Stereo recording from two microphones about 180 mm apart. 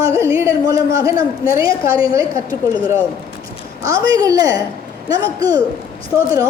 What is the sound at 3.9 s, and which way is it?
A woman's voice, 20° right (ahead or behind).